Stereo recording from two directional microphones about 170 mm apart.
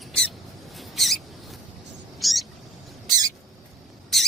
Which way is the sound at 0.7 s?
Centre (ahead or behind).